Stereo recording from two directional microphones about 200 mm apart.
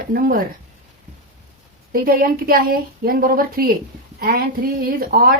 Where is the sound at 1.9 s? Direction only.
45° right (ahead or behind).